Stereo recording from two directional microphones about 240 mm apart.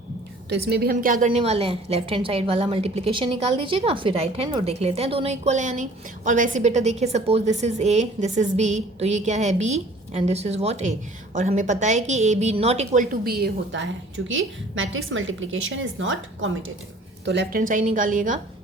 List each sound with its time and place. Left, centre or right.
0.5 s a woman's voice: right